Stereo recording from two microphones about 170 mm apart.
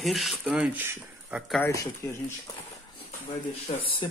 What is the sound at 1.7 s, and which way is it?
Speech, 20° left (ahead or behind).